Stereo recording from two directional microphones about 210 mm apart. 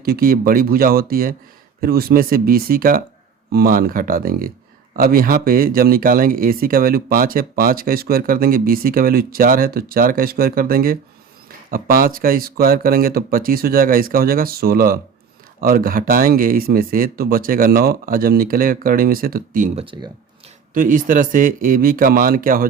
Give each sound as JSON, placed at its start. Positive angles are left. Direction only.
{"t": 0.0, "sound": "speech", "side_deg": -45}
{"t": 19.8, "sound": "speech", "side_deg": -25}
{"t": 20.7, "sound": "speech", "side_deg": -40}